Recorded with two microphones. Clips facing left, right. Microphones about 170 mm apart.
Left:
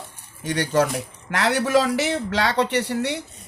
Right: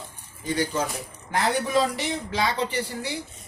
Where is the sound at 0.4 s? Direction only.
75° left (ahead or behind).